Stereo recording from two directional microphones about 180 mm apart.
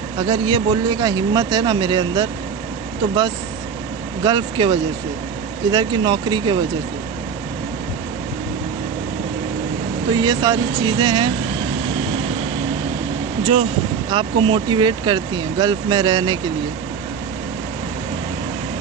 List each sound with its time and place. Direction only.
0.2 s speech: 25° right (ahead or behind)
4.2 s speech: 25° right (ahead or behind)
10.1 s speech: 20° right (ahead or behind)
13.4 s speech: 30° right (ahead or behind)